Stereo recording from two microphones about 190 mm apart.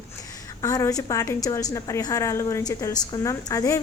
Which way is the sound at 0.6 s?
15° left (ahead or behind).